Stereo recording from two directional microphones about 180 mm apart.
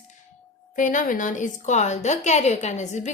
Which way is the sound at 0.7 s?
45° left (ahead or behind).